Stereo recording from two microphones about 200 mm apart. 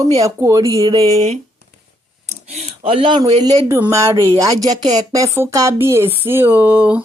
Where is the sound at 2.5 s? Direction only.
30° right (ahead or behind); by 4.3 s 15° right (ahead or behind).